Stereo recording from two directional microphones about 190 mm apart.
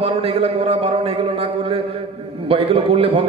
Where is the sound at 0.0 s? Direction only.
30° right (ahead or behind).